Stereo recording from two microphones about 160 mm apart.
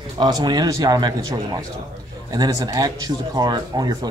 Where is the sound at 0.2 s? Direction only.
25° right (ahead or behind).